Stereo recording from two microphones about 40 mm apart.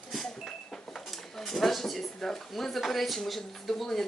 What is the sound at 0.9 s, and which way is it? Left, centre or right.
Speech, centre.